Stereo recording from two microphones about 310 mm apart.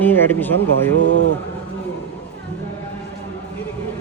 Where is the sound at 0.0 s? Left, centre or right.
Centre.